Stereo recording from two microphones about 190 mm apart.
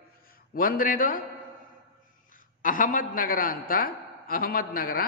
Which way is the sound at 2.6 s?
45° left (ahead or behind).